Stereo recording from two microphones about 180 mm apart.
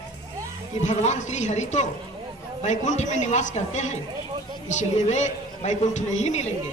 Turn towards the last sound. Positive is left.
turn(degrees=40)  # may be behind; listen again after turning